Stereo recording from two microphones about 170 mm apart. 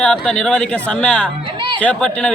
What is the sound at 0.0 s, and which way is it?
A man's voice, 5° left (ahead or behind).